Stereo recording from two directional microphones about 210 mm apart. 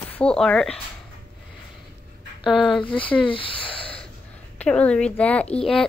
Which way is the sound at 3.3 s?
25° left (ahead or behind).